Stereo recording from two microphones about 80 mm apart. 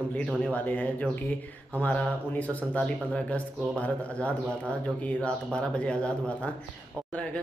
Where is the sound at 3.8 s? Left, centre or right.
Centre.